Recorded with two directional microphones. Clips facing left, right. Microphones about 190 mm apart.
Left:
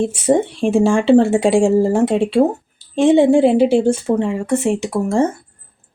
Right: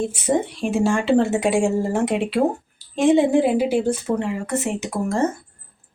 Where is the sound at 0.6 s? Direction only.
30° left (ahead or behind).